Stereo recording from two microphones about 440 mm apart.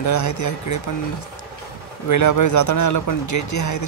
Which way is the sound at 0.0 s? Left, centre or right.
Left.